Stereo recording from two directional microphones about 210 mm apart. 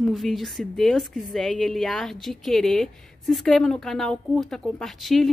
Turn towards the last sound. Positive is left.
turn(degrees=0)  # may be behind; listen again after turning